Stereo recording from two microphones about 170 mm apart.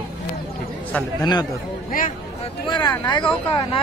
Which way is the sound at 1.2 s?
25° left (ahead or behind).